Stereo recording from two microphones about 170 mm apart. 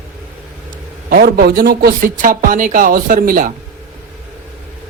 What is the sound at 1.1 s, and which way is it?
A man's voice, 60° right (ahead or behind).